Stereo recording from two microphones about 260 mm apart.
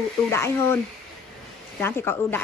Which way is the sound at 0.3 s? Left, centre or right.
Centre.